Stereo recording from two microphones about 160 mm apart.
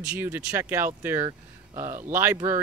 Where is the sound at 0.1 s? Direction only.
15° right (ahead or behind).